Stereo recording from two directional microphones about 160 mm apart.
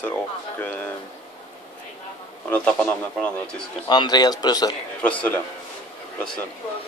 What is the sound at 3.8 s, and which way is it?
Speech, 25° left (ahead or behind).